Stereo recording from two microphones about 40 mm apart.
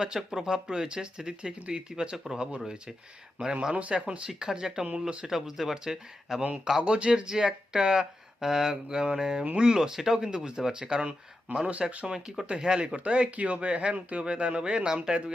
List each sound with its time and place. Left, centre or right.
0.0 s speech: centre
2.1 s speech: centre
3.4 s speech: right
4.3 s speech: centre
5.3 s speech: centre
11.5 s speech: right
12.5 s speech: centre